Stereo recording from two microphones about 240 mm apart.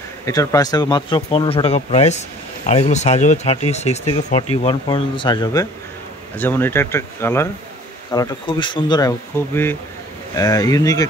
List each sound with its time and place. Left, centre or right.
0.2 s speech: centre
10.3 s speech: centre